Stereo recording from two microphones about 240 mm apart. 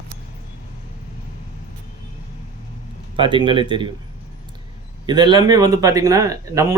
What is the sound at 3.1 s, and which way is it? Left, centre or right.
Speech, right.